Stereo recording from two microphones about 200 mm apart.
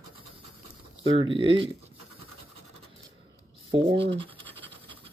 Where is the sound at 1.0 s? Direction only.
25° right (ahead or behind).